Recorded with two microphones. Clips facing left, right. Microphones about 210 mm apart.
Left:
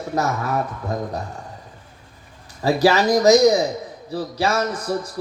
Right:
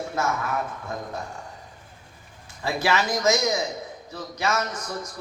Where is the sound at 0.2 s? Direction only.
35° left (ahead or behind).